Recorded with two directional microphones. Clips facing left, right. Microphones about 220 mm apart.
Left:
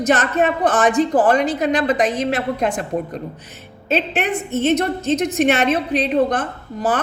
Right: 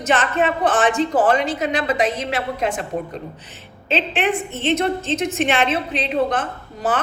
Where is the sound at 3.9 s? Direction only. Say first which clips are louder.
Left 1 dB; 40° left (ahead or behind).